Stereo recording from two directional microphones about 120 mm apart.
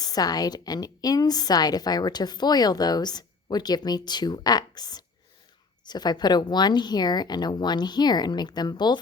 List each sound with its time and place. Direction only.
0.0 s a woman's voice: 30° left (ahead or behind)